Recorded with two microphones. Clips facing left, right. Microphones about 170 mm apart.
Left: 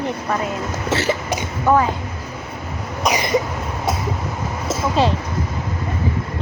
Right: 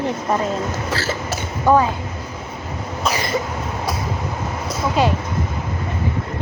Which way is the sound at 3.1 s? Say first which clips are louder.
Left 3 dB; 15° left (ahead or behind).